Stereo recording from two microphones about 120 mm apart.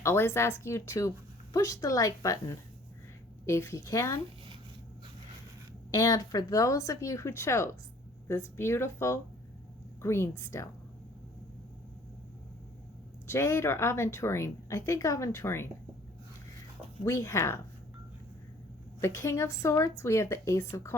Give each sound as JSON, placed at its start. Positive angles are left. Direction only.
{"t": 0.0, "sound": "a woman's voice", "side_deg": 20}
{"t": 5.9, "sound": "a woman's voice", "side_deg": 30}
{"t": 13.2, "sound": "a woman's voice", "side_deg": 20}
{"t": 17.1, "sound": "a woman's voice", "side_deg": 25}
{"t": 19.0, "sound": "a woman's voice", "side_deg": 25}